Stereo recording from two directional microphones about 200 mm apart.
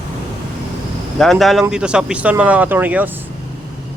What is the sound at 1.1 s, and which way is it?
Speech, centre (ahead or behind).